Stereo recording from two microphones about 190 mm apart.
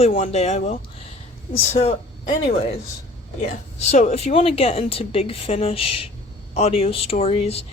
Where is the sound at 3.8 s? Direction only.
35° left (ahead or behind).